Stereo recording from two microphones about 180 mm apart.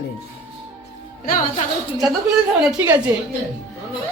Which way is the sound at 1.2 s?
50° left (ahead or behind).